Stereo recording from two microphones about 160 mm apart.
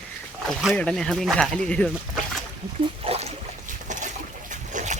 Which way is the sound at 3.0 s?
40° right (ahead or behind).